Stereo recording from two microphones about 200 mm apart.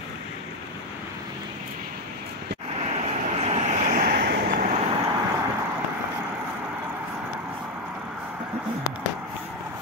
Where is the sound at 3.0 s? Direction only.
30° right (ahead or behind); by 4.7 s 50° right (ahead or behind).